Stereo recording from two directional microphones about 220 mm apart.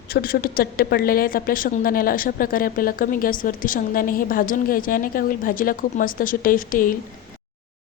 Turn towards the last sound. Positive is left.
turn(degrees=40)  # may be behind; listen again after turning